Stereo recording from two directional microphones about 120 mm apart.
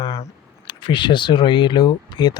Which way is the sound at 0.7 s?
40° left (ahead or behind).